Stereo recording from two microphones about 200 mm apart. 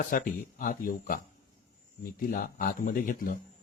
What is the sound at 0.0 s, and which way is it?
A man's voice, 45° left (ahead or behind).